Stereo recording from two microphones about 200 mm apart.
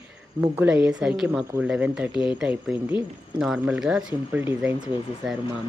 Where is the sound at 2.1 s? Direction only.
25° left (ahead or behind).